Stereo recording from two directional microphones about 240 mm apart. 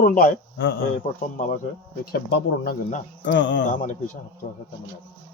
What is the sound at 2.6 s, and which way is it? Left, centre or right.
A man's voice, left.